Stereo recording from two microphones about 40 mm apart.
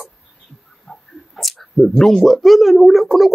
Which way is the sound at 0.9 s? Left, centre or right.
Centre.